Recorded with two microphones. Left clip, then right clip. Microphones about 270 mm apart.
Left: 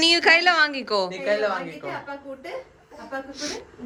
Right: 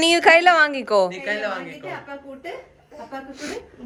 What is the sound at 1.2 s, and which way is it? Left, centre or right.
Speech, left.